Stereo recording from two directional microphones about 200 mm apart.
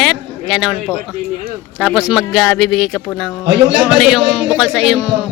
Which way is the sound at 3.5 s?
60° right (ahead or behind).